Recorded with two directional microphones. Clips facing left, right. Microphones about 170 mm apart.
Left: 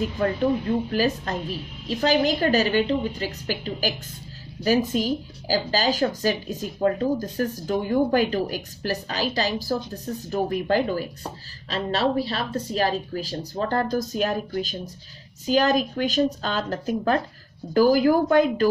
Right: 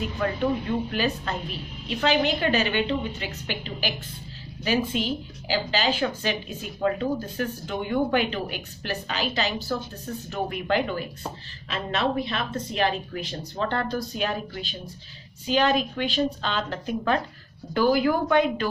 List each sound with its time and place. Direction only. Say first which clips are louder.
0.2 s speech: left 2 dB; 35° left (ahead or behind)